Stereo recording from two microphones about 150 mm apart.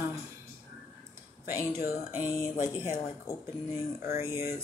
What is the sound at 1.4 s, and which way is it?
Speech, 15° right (ahead or behind).